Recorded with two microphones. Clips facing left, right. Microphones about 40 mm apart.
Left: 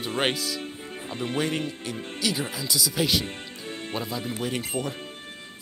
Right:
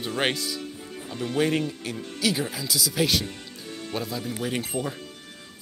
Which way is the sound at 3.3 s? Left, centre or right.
Left.